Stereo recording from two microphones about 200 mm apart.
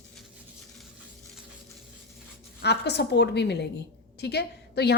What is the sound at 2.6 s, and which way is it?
A woman's voice, 55° left (ahead or behind).